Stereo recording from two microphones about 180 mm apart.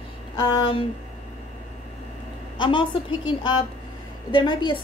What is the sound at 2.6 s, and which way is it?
A woman's voice, 25° left (ahead or behind).